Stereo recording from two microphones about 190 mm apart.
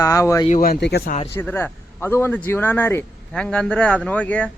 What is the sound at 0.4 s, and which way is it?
Speech, 45° left (ahead or behind).